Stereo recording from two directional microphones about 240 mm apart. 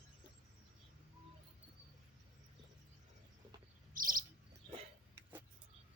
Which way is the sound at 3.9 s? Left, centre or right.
Right.